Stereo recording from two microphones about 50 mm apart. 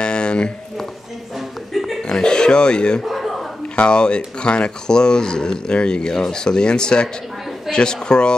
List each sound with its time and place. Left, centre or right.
0.0 s a sound: centre
1.7 s chuckle: centre
2.0 s speech: centre
3.0 s chuckle: centre
3.7 s speech: left